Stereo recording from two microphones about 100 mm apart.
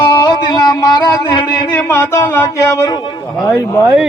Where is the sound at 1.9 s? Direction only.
25° left (ahead or behind); by 3.3 s 45° left (ahead or behind).